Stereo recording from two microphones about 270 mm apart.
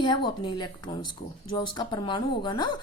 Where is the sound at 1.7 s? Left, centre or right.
Centre.